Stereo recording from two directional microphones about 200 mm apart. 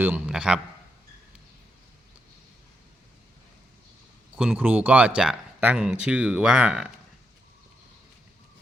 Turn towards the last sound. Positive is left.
turn(degrees=-5)  # may be behind; listen again after turning